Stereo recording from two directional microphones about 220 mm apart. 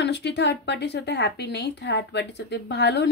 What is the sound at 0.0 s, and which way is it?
Speech, 50° left (ahead or behind).